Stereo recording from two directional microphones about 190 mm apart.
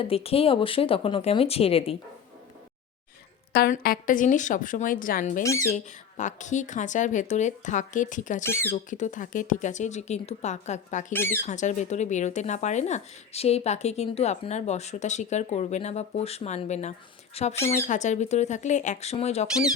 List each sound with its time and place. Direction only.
0.0 s speech: 30° left (ahead or behind)
3.5 s a woman's voice: 50° left (ahead or behind)
5.4 s speech: 15° left (ahead or behind)
5.7 s speech: 40° left (ahead or behind)
11.1 s speech: 10° left (ahead or behind)
11.4 s speech: 40° left (ahead or behind)